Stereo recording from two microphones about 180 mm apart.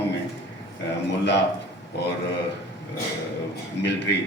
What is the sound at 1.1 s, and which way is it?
Speech, 70° left (ahead or behind).